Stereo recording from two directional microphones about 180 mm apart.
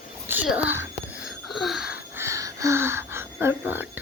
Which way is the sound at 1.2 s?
Centre (ahead or behind).